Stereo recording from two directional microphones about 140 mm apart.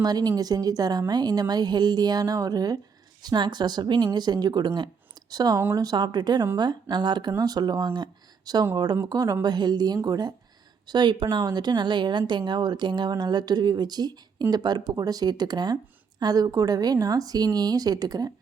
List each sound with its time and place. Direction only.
0.0 s a woman's voice: 30° right (ahead or behind)
7.9 s a sound: 30° right (ahead or behind)
8.7 s a woman's voice: 30° right (ahead or behind)